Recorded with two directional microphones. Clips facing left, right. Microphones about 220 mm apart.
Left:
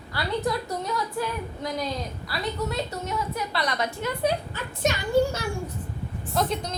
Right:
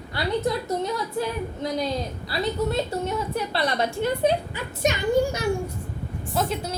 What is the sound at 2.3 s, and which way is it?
A woman's voice, 30° right (ahead or behind).